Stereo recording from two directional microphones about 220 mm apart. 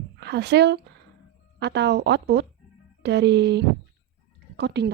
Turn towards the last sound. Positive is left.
turn(degrees=-50)  # may be behind; listen again after turning